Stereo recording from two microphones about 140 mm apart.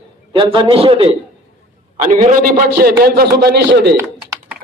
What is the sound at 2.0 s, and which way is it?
A man's voice, 60° right (ahead or behind).